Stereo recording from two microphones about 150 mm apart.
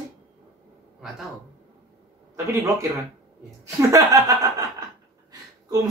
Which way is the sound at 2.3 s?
20° right (ahead or behind).